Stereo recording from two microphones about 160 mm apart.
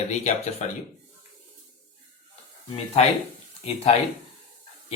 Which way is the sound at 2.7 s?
40° left (ahead or behind).